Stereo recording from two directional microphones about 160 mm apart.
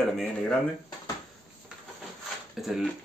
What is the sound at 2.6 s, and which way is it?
Speech, centre (ahead or behind).